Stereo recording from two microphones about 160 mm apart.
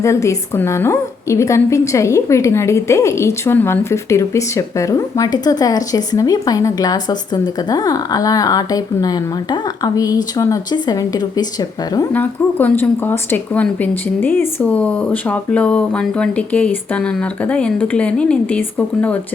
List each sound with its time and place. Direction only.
0.0 s a woman's voice: 20° left (ahead or behind)
12.1 s speech: 10° left (ahead or behind)